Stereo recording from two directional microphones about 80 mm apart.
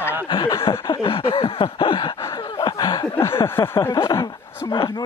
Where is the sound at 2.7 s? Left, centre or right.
Left.